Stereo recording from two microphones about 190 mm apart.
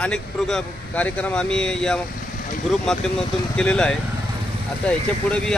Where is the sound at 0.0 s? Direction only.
5° left (ahead or behind).